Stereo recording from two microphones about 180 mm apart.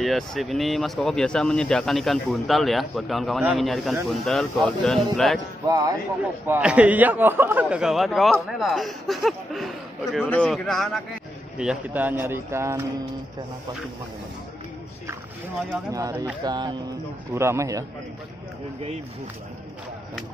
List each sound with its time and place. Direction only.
0.0 s speech: centre (ahead or behind)
6.4 s a man's voice: 10° right (ahead or behind)
15.9 s a man's voice: 20° right (ahead or behind)